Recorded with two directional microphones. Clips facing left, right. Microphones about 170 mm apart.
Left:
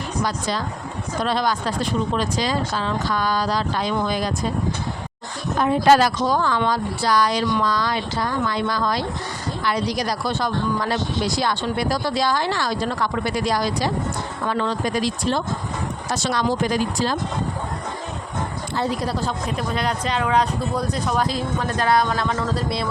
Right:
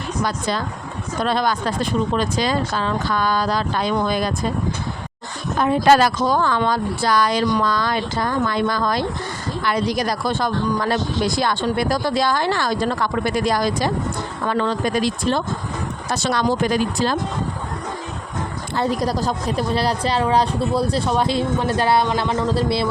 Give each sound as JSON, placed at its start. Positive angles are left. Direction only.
{"t": 0.3, "sound": "speech", "side_deg": -55}
{"t": 5.9, "sound": "speech", "side_deg": -60}
{"t": 18.8, "sound": "a woman's voice", "side_deg": -45}